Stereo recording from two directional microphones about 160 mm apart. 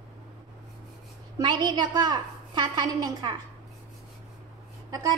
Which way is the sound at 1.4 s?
25° right (ahead or behind).